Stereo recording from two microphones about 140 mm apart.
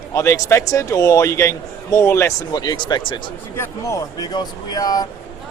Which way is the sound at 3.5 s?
20° left (ahead or behind).